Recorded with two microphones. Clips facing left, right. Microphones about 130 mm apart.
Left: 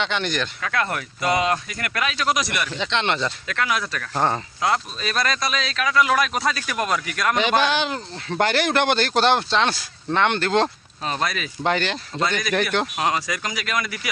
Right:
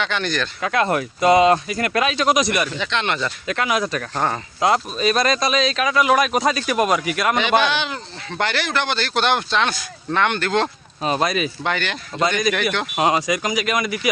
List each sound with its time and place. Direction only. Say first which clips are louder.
0.0 s speech: right 1 dB; 20° left (ahead or behind)
0.6 s speech: right 9 dB; 20° right (ahead or behind)
2.7 s speech: even; 25° left (ahead or behind)
3.4 s speech: right 4 dB; 20° right (ahead or behind)
7.3 s speech: even; 40° left (ahead or behind)
11.0 s speech: right 6 dB; 20° right (ahead or behind)
11.6 s speech: left 2 dB; 35° left (ahead or behind)
13.0 s speech: right 5 dB; 20° right (ahead or behind)